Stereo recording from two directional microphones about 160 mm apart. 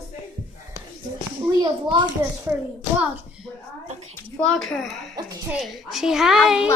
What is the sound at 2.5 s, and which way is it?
Speech, 10° right (ahead or behind).